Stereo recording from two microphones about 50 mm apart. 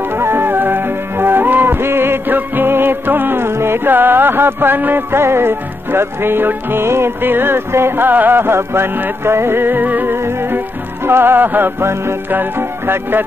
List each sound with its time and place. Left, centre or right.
0.1 s music: right
5.1 s music: right
10.1 s music: right
11.8 s music: right
12.3 s music: right